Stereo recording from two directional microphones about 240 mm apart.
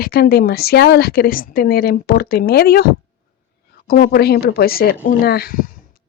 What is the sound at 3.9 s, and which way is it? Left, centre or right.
A woman's voice, left.